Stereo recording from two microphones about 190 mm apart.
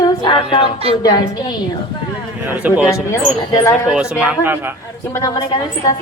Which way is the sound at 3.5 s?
15° left (ahead or behind).